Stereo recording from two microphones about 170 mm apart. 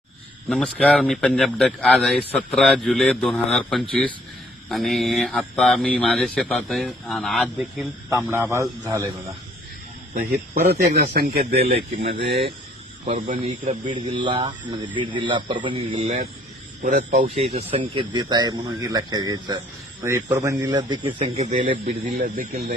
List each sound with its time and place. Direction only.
0.4 s speech: 5° left (ahead or behind)
8.1 s a man's voice: 15° right (ahead or behind)
11.1 s speech: 65° right (ahead or behind)
11.7 s speech: 35° right (ahead or behind)
13.1 s speech: 55° right (ahead or behind)
13.9 s speech: 30° right (ahead or behind)
16.0 s speech: 50° right (ahead or behind)
17.3 s speech: 35° right (ahead or behind)
22.2 s speech: 60° right (ahead or behind)